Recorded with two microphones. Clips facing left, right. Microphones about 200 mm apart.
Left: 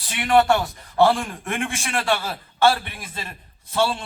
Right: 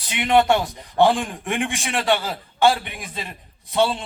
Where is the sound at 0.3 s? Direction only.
20° right (ahead or behind).